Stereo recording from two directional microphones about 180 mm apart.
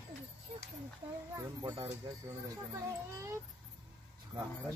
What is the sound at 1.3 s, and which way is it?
Speech, 15° right (ahead or behind).